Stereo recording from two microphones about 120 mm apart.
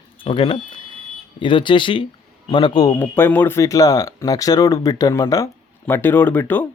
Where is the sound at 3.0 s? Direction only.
15° left (ahead or behind).